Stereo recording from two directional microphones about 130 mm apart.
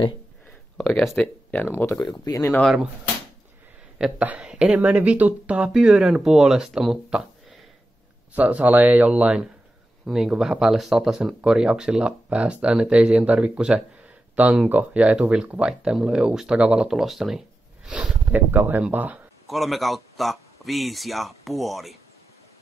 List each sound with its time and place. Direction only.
0.7 s speech: 5° left (ahead or behind)
1.2 s speech: 15° left (ahead or behind)
2.0 s speech: 30° left (ahead or behind)
2.6 s speech: 5° right (ahead or behind)
4.0 s speech: 10° right (ahead or behind)
19.4 s speech: centre (ahead or behind)